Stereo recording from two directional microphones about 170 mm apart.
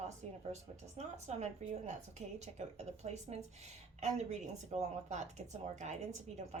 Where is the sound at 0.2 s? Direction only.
40° right (ahead or behind).